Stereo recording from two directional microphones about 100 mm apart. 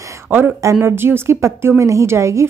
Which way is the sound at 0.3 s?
20° right (ahead or behind).